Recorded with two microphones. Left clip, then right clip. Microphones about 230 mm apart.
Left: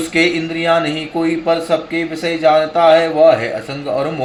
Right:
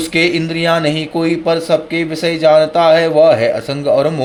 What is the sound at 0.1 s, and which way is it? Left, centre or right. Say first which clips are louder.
Speech: right 1 dB; right.